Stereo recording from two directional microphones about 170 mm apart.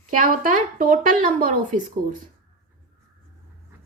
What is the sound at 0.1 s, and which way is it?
Speech, 55° right (ahead or behind).